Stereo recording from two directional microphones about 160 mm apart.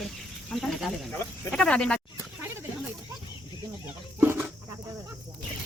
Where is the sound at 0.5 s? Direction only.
Centre (ahead or behind).